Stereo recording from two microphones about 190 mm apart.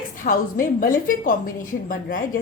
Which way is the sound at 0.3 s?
45° left (ahead or behind).